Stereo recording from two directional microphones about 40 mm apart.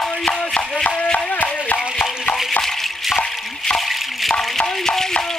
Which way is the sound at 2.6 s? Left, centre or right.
Centre.